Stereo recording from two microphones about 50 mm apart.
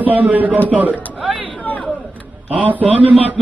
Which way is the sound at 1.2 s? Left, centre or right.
Right.